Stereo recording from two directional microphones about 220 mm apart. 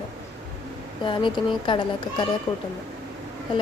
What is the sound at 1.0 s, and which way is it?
A woman's voice, 20° left (ahead or behind).